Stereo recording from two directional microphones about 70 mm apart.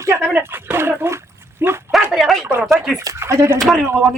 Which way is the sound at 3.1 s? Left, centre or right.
Right.